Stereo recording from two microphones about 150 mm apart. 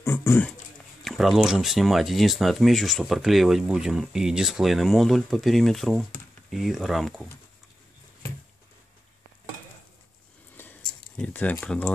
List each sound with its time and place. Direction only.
0.0 s speech: 20° left (ahead or behind)
1.0 s speech: centre (ahead or behind)
10.6 s a sound: 15° left (ahead or behind)
11.1 s speech: 10° left (ahead or behind)